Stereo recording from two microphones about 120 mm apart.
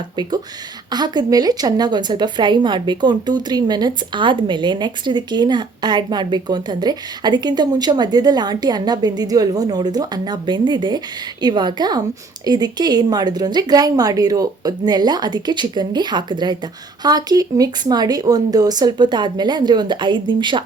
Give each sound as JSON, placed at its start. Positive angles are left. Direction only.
{"t": 0.9, "sound": "speech", "side_deg": -35}